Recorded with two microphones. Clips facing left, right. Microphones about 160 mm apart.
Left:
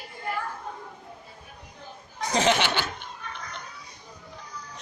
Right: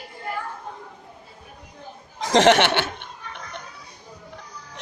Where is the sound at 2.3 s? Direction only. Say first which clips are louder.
Right 7 dB; 80° right; by 3.0 s 65° right (ahead or behind).